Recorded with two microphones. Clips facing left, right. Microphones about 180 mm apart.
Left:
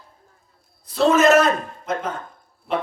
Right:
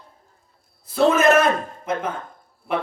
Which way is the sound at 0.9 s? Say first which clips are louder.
Left 1 dB; 55° right (ahead or behind).